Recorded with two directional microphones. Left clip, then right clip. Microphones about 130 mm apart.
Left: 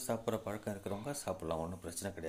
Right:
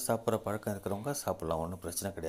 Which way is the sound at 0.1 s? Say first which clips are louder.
Right 6 dB; 35° right (ahead or behind).